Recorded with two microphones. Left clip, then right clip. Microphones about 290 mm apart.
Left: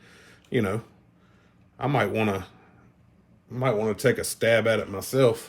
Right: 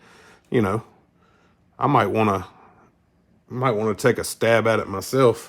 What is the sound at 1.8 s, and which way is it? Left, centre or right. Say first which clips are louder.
Speech: right 6 dB; right.